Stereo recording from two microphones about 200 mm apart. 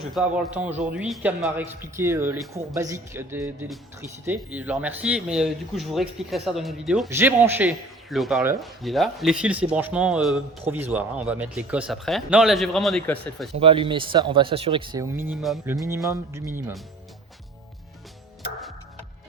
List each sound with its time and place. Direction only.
0.0 s a man's voice: 5° right (ahead or behind)
13.6 s speech: 25° right (ahead or behind); by 15.7 s 5° right (ahead or behind)
15.7 s a man's voice: 15° right (ahead or behind)